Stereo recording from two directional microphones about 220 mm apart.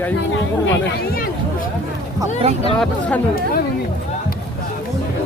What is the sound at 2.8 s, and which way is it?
Speech, 5° left (ahead or behind).